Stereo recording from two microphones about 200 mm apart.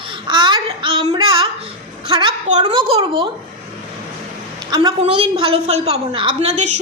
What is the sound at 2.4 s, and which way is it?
Speech, 35° right (ahead or behind).